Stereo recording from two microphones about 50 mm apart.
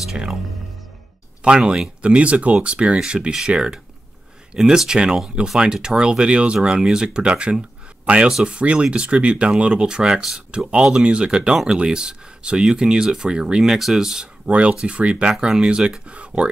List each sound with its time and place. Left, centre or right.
0.1 s speech: centre
1.7 s speech: right
14.4 s speech: right
15.3 s speech: centre